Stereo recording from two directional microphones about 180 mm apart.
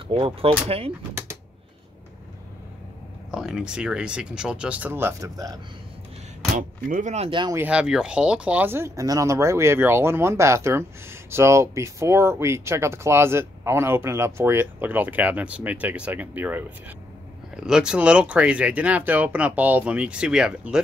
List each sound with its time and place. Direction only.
0.1 s speech: 30° right (ahead or behind)
3.3 s speech: 5° right (ahead or behind); by 5.6 s 20° right (ahead or behind)
6.5 s speech: 45° right (ahead or behind)
7.2 s speech: 25° right (ahead or behind)
7.5 s speech: 5° right (ahead or behind)
17.6 s speech: 5° right (ahead or behind)